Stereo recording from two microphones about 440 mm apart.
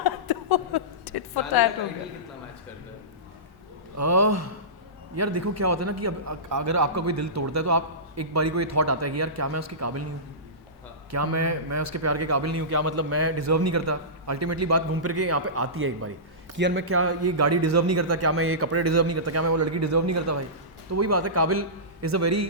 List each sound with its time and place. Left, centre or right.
0.0 s a sound: left
3.9 s a man's voice: right
11.1 s a man's voice: right